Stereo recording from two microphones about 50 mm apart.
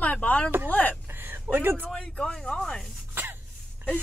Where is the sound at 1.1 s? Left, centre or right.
Right.